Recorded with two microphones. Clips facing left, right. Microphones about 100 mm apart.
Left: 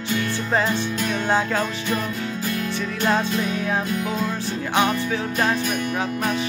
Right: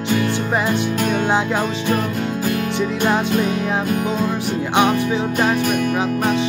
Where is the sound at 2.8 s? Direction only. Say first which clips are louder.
Right 3 dB; 15° right (ahead or behind).